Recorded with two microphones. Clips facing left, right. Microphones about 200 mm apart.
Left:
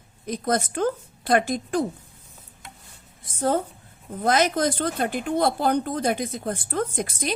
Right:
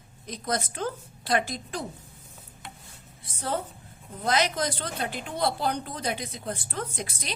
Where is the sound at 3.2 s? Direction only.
45° left (ahead or behind).